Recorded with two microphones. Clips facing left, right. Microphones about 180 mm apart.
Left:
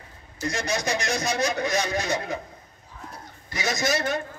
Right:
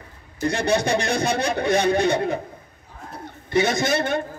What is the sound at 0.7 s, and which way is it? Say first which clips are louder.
Speech: right 6 dB; 30° right (ahead or behind).